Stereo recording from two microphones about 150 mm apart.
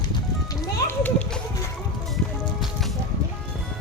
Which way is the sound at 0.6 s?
15° left (ahead or behind).